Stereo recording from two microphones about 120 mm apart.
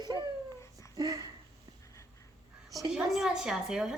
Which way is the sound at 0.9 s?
30° right (ahead or behind).